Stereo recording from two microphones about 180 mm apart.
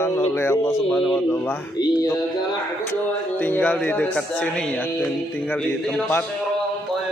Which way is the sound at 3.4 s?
10° left (ahead or behind).